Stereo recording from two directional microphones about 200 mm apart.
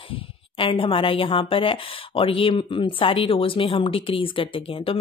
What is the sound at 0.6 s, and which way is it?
Speech, 25° left (ahead or behind).